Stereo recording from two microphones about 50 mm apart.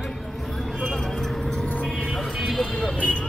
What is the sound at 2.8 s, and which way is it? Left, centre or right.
Vehicle, left.